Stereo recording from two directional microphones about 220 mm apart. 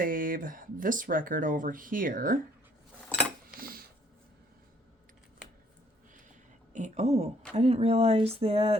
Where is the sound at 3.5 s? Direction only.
40° right (ahead or behind).